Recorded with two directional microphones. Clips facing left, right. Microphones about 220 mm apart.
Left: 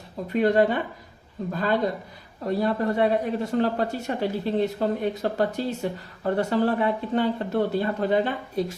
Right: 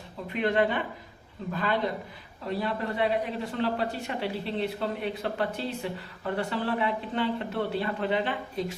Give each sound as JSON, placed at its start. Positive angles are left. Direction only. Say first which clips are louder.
{"t": 0.3, "sound": "a man's voice", "louder": "left 5 dB", "side_deg": 40}